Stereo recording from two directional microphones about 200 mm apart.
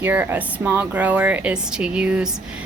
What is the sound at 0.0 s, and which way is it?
A woman's voice, 10° right (ahead or behind).